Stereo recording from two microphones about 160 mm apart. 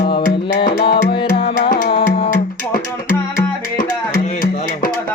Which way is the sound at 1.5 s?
60° left (ahead or behind).